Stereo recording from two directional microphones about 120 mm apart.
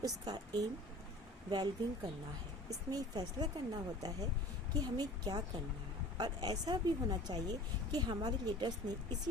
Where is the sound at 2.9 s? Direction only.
30° right (ahead or behind).